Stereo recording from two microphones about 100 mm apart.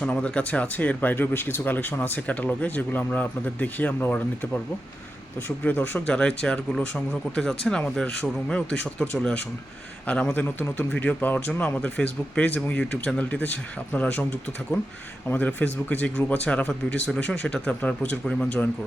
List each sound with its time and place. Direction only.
0.0 s speech: 10° left (ahead or behind)
15.3 s speech: 20° left (ahead or behind)